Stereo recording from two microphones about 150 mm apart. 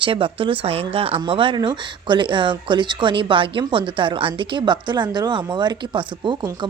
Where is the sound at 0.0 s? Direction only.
35° right (ahead or behind).